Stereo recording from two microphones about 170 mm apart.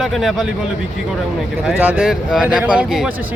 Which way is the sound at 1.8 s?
10° right (ahead or behind).